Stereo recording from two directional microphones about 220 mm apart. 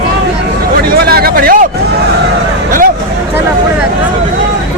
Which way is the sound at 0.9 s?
45° right (ahead or behind).